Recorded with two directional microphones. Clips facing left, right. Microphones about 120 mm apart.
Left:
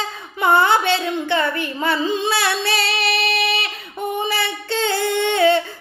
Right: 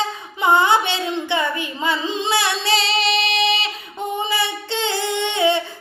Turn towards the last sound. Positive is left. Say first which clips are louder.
# left 3 dB
turn(degrees=-20)  # may be behind; listen again after turning